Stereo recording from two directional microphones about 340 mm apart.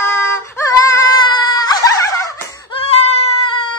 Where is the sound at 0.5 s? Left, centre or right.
Centre.